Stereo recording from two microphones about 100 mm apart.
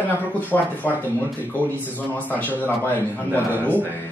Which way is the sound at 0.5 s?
15° left (ahead or behind).